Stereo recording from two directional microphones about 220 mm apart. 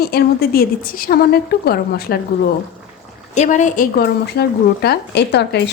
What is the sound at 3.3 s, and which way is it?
Speech, 35° left (ahead or behind).